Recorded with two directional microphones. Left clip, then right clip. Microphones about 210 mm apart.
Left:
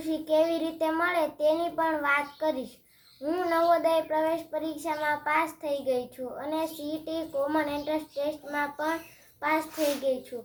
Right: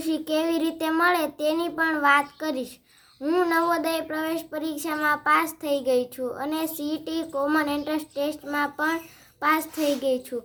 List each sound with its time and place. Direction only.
0.0 s child singing: 55° right (ahead or behind)
10.0 s child singing: 55° right (ahead or behind)